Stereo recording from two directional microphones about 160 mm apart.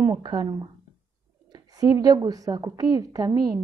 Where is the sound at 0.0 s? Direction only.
30° right (ahead or behind).